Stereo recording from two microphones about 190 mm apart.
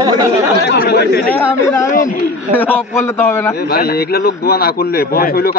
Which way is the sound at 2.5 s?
10° left (ahead or behind).